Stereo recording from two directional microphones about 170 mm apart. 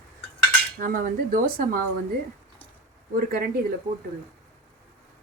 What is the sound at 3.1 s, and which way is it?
Speech, 55° right (ahead or behind).